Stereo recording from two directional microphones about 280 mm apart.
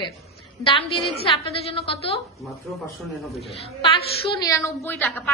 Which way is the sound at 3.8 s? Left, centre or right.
Centre.